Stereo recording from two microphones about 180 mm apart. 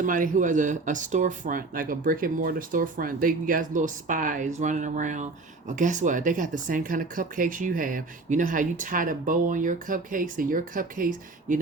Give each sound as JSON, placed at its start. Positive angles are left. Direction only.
{"t": 0.0, "sound": "speech", "side_deg": -45}